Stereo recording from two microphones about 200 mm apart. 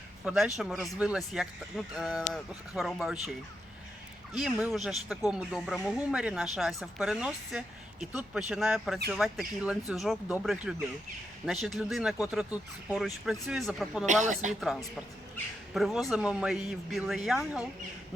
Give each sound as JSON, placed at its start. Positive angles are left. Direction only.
{"t": 0.3, "sound": "speech", "side_deg": -5}
{"t": 4.4, "sound": "speech", "side_deg": -5}
{"t": 14.1, "sound": "a woman's voice", "side_deg": -35}
{"t": 14.6, "sound": "speech", "side_deg": 0}